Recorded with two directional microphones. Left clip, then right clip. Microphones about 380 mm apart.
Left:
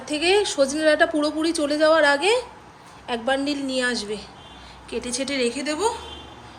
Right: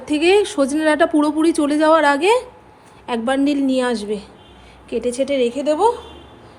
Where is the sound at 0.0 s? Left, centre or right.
Centre.